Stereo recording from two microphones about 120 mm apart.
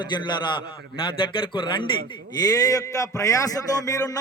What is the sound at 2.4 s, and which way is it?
A man's voice, 30° left (ahead or behind).